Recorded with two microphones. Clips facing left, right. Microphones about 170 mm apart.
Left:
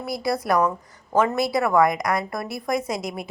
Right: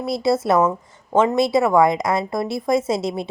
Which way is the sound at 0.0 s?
25° right (ahead or behind).